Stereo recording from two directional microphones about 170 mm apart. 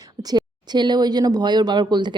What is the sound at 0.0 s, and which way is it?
Speech, 20° right (ahead or behind).